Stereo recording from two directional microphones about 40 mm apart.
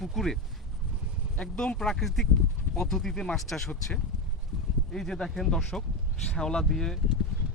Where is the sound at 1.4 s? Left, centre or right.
Left.